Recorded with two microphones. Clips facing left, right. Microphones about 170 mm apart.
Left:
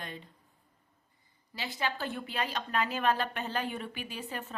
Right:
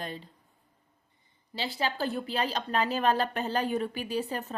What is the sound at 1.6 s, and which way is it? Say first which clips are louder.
Speech: right 4 dB; 30° right (ahead or behind).